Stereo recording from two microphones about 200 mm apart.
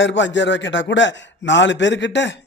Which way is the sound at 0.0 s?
65° left (ahead or behind).